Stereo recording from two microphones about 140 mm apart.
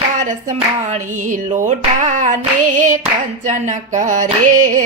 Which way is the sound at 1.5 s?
60° right (ahead or behind).